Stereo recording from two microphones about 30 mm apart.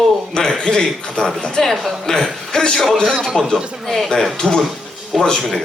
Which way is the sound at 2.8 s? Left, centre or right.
Centre.